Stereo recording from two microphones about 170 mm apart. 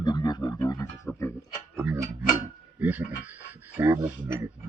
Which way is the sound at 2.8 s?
10° right (ahead or behind).